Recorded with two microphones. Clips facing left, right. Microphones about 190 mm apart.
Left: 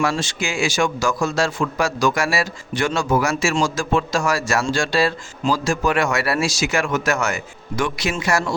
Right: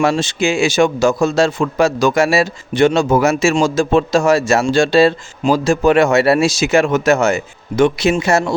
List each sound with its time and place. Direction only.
0.0 s speech: 25° right (ahead or behind)